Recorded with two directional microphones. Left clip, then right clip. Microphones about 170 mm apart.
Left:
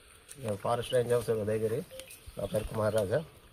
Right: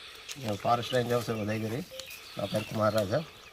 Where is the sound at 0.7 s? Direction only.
35° left (ahead or behind).